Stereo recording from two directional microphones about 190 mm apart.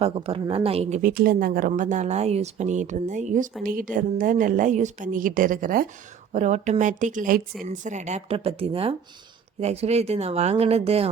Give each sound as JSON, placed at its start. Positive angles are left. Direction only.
{"t": 0.0, "sound": "a woman's voice", "side_deg": -30}
{"t": 1.1, "sound": "a woman's voice", "side_deg": -50}